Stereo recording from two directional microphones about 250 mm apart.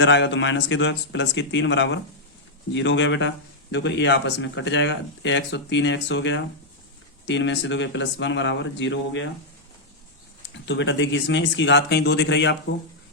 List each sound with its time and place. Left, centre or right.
0.0 s speech: left
10.7 s speech: left